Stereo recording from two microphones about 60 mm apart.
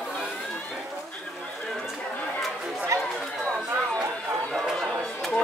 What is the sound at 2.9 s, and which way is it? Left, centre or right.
Chatter, right.